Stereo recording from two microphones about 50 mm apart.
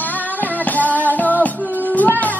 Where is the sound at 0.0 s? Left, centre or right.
Left.